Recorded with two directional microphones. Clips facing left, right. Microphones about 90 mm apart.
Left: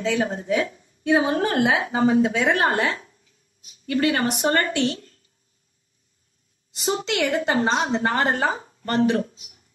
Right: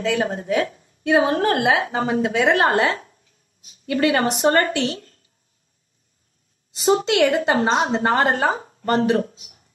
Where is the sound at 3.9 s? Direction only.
35° right (ahead or behind).